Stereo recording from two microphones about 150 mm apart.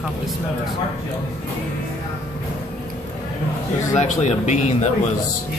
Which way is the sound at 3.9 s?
50° left (ahead or behind).